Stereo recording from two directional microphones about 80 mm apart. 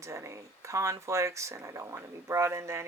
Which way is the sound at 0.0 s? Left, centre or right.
Right.